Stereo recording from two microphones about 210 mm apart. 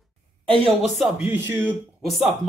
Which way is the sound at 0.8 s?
Centre (ahead or behind).